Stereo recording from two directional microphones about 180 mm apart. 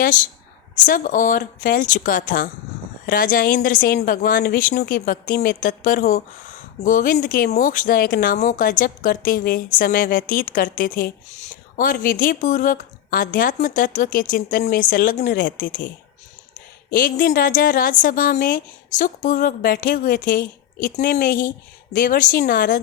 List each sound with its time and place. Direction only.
0.9 s a woman's voice: 50° left (ahead or behind)
16.9 s a woman's voice: 50° left (ahead or behind)